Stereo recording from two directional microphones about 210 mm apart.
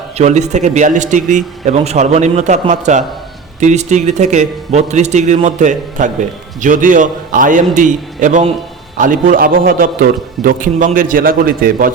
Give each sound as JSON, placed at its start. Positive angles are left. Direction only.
{"t": 0.2, "sound": "a man's voice", "side_deg": -35}